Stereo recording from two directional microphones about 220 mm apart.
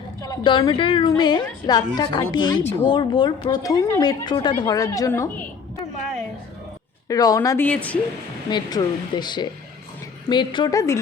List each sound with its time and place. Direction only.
0.2 s a woman's voice: 20° left (ahead or behind)
7.1 s a woman's voice: 15° left (ahead or behind)
8.4 s a woman's voice: 20° left (ahead or behind)